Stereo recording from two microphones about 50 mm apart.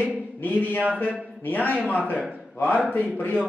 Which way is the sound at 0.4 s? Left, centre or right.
Left.